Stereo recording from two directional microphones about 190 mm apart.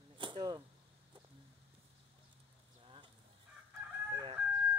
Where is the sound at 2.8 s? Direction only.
25° right (ahead or behind).